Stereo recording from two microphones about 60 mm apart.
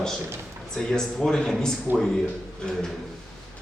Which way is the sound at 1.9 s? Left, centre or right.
Right.